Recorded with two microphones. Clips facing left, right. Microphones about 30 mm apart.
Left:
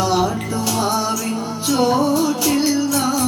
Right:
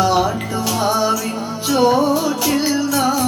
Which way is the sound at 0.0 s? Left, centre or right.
Centre.